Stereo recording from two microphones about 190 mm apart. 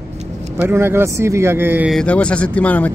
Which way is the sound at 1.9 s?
5° left (ahead or behind).